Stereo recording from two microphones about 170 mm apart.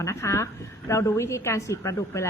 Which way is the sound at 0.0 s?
15° left (ahead or behind).